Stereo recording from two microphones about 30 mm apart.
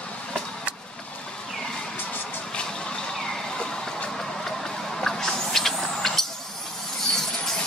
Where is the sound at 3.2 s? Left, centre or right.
Left.